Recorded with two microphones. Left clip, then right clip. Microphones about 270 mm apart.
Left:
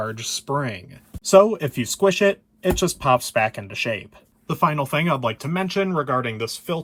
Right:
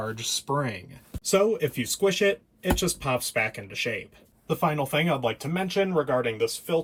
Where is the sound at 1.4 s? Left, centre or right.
Centre.